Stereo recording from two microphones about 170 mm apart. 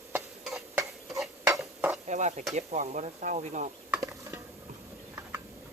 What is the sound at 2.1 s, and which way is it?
Speech, 45° right (ahead or behind).